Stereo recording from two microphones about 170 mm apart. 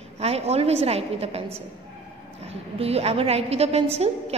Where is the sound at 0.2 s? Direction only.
35° right (ahead or behind).